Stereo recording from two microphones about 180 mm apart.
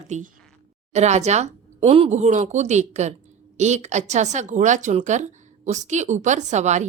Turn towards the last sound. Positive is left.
turn(degrees=-40)  # may be behind; listen again after turning